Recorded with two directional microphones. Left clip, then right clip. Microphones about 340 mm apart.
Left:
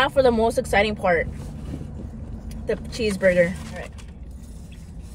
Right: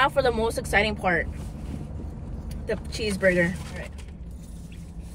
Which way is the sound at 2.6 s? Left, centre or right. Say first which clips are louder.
Left 4 dB; centre.